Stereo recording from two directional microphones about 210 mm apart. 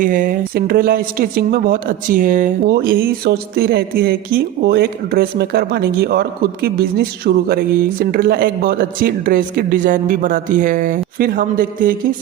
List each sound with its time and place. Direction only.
0.0 s speech: 40° right (ahead or behind)